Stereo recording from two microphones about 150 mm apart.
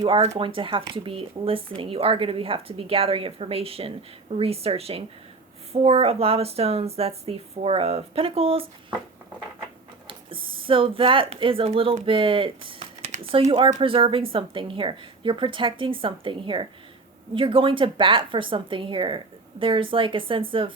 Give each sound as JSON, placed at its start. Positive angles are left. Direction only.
{"t": 0.0, "sound": "speech", "side_deg": -40}
{"t": 10.1, "sound": "speech", "side_deg": -35}